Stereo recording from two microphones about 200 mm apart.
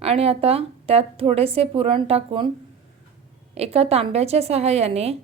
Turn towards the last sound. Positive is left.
turn(degrees=-30)  # may be behind; listen again after turning